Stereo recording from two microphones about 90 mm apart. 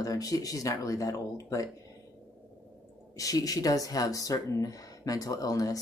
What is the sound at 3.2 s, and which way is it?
Speech, 40° left (ahead or behind).